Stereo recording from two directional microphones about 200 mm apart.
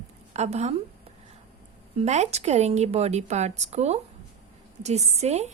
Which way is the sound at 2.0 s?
35° right (ahead or behind).